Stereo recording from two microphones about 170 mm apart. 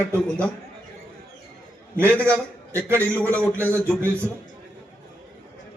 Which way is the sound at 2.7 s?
15° right (ahead or behind).